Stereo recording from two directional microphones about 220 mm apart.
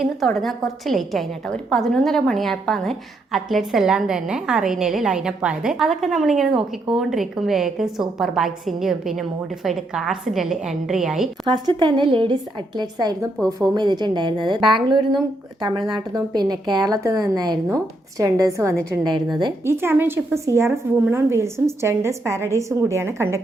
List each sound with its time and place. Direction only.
0.0 s a woman's voice: centre (ahead or behind)
6.5 s speech: 20° right (ahead or behind)
6.9 s a woman's voice: centre (ahead or behind)
11.4 s a woman's voice: 20° right (ahead or behind)